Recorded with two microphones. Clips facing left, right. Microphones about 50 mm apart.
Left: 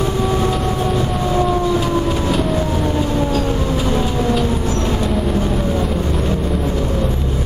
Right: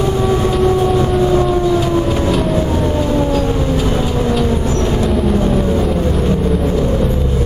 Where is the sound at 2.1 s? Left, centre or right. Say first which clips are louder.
Right 3 dB; centre.